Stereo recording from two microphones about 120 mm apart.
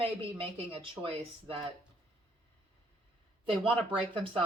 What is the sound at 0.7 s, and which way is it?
Speech, 50° right (ahead or behind).